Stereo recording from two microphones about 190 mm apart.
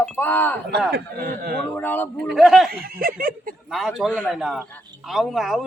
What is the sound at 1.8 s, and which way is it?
Speech, 10° left (ahead or behind).